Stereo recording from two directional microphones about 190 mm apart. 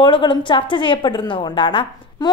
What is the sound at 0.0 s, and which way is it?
A woman's voice, 25° left (ahead or behind).